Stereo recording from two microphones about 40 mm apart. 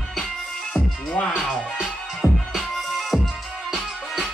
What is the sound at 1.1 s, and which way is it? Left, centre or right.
Music, left.